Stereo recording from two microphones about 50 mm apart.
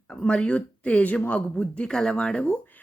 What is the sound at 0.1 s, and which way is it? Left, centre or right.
Speech, centre.